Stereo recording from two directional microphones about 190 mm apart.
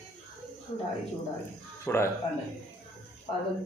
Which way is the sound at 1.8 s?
15° left (ahead or behind).